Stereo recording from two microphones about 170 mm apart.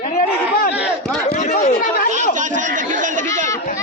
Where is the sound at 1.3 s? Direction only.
40° left (ahead or behind).